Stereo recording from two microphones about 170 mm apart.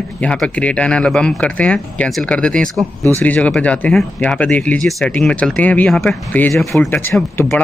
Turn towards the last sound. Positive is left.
turn(degrees=5)  # may be behind; listen again after turning